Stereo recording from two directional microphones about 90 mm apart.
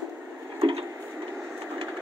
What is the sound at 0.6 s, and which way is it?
Wood, 90° right.